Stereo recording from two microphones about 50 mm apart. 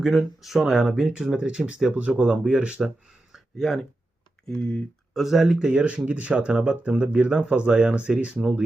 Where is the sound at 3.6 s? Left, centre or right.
Centre.